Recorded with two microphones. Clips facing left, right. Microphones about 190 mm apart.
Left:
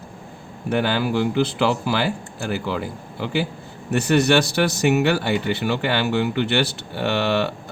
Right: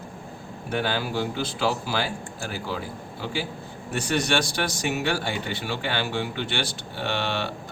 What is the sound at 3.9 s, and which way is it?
Speech, 60° left (ahead or behind).